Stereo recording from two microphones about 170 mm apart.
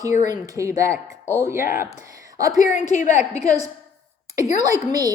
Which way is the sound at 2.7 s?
45° left (ahead or behind).